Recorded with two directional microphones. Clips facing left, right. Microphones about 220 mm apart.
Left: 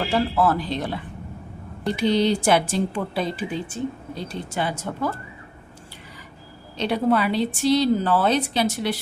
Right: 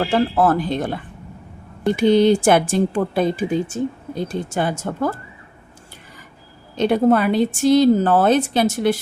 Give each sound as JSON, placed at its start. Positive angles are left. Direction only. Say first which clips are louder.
{"t": 0.1, "sound": "speech", "louder": "right 2 dB", "side_deg": -50}
{"t": 6.7, "sound": "speech", "louder": "right 5 dB", "side_deg": -50}